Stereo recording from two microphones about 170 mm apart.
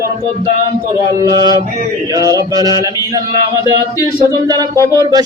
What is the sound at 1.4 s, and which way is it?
Speech, 25° right (ahead or behind).